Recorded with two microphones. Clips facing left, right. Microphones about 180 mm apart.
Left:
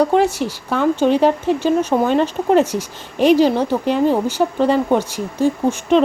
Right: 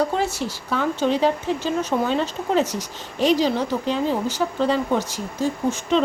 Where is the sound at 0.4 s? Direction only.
65° left (ahead or behind).